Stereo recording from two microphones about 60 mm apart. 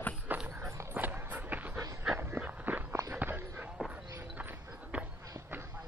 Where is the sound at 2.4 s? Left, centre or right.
Right.